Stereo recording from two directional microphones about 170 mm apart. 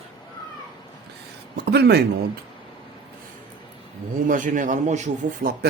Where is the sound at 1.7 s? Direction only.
75° right (ahead or behind).